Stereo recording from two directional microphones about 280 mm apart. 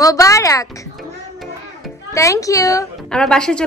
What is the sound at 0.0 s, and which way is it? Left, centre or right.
Speech, centre.